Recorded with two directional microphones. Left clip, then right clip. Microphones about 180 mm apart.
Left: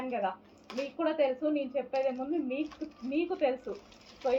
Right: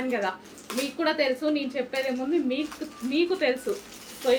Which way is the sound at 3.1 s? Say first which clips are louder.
Right 6 dB; 25° right (ahead or behind).